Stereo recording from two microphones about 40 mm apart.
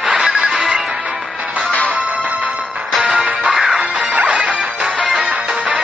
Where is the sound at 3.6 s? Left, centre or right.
Centre.